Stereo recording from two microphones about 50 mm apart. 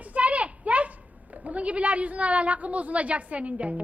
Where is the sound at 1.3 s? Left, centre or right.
Right.